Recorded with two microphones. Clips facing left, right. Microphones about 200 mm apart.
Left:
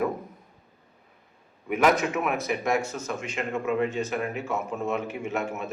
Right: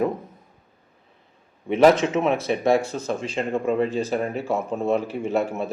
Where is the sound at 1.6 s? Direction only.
30° right (ahead or behind).